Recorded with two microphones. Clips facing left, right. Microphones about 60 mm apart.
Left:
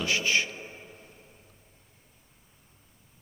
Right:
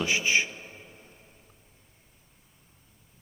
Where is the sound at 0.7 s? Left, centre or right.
Centre.